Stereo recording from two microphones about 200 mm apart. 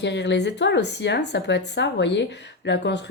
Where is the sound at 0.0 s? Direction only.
60° left (ahead or behind).